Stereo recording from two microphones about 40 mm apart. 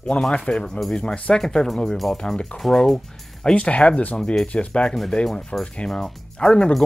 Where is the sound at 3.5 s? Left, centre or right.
Left.